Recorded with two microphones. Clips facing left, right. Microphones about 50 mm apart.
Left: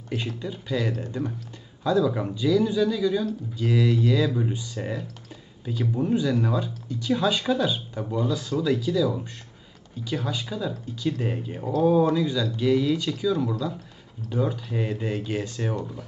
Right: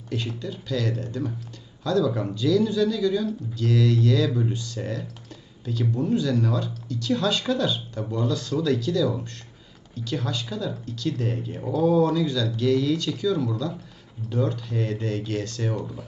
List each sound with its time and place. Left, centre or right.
0.4 s speech: centre
15.8 s speech: centre